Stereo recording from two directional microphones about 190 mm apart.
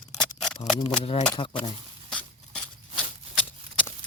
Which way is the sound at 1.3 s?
25° left (ahead or behind).